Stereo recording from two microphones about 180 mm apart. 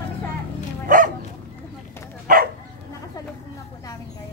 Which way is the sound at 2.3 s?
50° right (ahead or behind).